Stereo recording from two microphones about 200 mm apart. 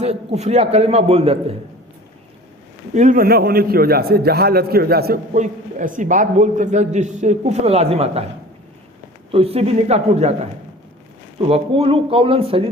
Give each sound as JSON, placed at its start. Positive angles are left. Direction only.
{"t": 0.0, "sound": "a man's voice", "side_deg": -30}
{"t": 2.9, "sound": "a man's voice", "side_deg": -40}
{"t": 9.3, "sound": "a man's voice", "side_deg": -30}